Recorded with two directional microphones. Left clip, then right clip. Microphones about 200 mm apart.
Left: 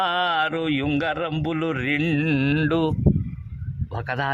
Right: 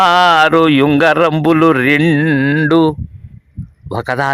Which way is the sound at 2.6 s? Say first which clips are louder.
Right 10 dB; 30° right (ahead or behind).